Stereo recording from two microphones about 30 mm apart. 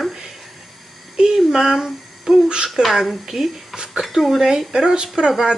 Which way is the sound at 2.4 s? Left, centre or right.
Right.